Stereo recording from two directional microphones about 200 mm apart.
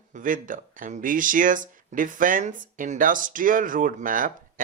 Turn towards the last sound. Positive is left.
turn(degrees=-45)  # may be behind; listen again after turning